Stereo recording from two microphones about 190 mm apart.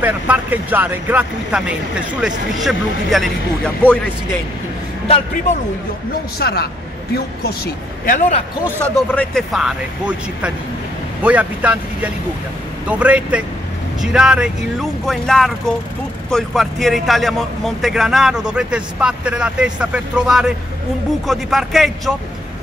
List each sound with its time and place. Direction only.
0.0 s a man's voice: 10° right (ahead or behind)
5.0 s a man's voice: 30° left (ahead or behind)
6.4 s a man's voice: 55° left (ahead or behind)
8.8 s a man's voice: 5° left (ahead or behind)